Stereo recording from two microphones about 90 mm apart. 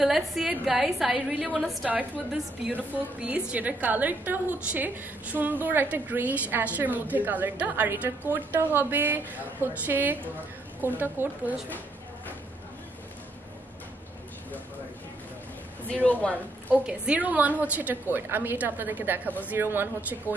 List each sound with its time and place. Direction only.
0.0 s a woman's voice: 5° right (ahead or behind)
1.6 s a woman's voice: centre (ahead or behind)
2.7 s a woman's voice: 15° right (ahead or behind)
15.9 s a woman's voice: 15° left (ahead or behind)
16.7 s a woman's voice: 10° right (ahead or behind)